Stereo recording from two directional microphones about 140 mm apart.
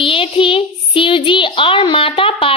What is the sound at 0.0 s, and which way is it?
A child's voice, 40° left (ahead or behind).